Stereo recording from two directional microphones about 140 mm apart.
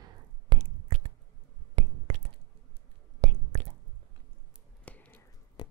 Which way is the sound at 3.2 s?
55° right (ahead or behind).